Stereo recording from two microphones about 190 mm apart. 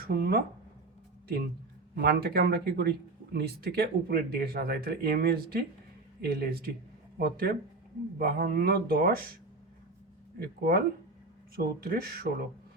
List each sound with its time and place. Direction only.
0.0 s speech: 50° right (ahead or behind)
2.0 s speech: 55° right (ahead or behind)
10.4 s speech: 55° right (ahead or behind)